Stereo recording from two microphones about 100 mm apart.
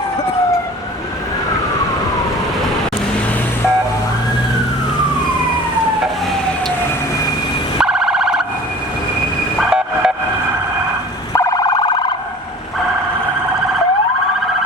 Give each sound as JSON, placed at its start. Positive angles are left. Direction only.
{"t": 7.8, "sound": "siren", "side_deg": -5}
{"t": 9.6, "sound": "vehicle", "side_deg": -5}
{"t": 11.3, "sound": "emergency vehicle", "side_deg": 35}